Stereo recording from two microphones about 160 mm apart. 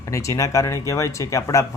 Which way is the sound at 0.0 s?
20° left (ahead or behind).